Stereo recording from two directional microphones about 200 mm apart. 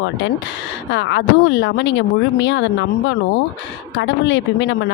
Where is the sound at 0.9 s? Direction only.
60° left (ahead or behind).